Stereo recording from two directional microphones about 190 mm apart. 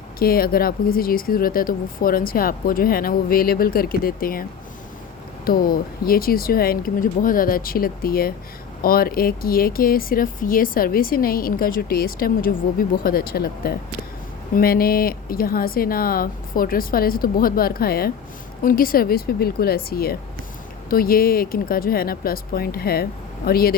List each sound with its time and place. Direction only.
0.2 s speech: 50° left (ahead or behind)
5.5 s speech: 50° left (ahead or behind)